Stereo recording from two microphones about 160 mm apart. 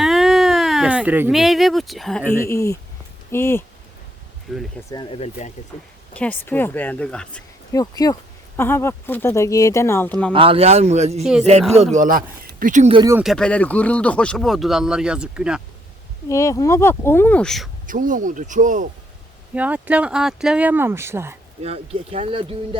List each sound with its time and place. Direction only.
0.0 s a sound: centre (ahead or behind)
1.4 s speech: centre (ahead or behind)
2.5 s speech: 20° left (ahead or behind)
4.5 s speech: centre (ahead or behind)
5.1 s speech: 45° left (ahead or behind)
6.1 s speech: 10° left (ahead or behind)
7.7 s speech: 20° left (ahead or behind)
10.3 s speech: 35° right (ahead or behind); by 12.9 s 55° right (ahead or behind)
13.2 s speech: 5° left (ahead or behind)
16.3 s speech: 20° left (ahead or behind); by 17.7 s 5° left (ahead or behind)
17.8 s speech: 55° right (ahead or behind)
19.5 s speech: 10° right (ahead or behind)
21.6 s speech: 40° right (ahead or behind)